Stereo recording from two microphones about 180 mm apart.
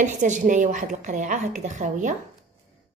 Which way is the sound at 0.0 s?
45° right (ahead or behind).